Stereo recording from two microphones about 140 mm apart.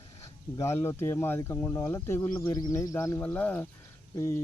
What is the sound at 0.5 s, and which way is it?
Speech, 20° left (ahead or behind).